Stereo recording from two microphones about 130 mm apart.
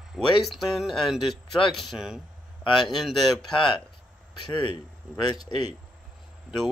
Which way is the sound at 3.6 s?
40° left (ahead or behind).